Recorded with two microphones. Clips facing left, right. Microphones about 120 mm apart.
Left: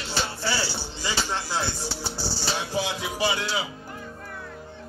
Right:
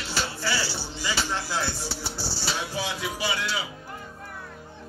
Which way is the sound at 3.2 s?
25° left (ahead or behind).